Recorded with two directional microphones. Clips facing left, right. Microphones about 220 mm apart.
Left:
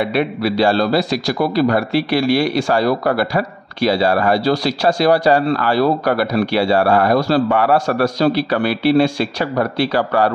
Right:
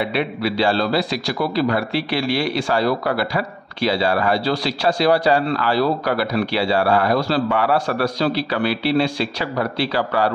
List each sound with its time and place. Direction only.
0.0 s a man's voice: 50° left (ahead or behind)